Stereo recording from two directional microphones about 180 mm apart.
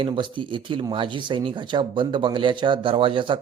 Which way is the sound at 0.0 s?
25° right (ahead or behind).